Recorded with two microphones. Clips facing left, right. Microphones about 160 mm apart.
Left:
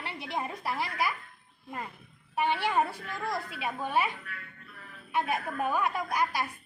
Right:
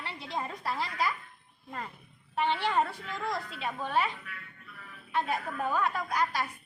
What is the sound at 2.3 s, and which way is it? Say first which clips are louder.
A woman's voice: left 1 dB; 10° left (ahead or behind).